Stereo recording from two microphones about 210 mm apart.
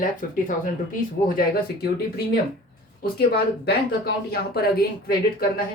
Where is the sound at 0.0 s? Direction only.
40° left (ahead or behind).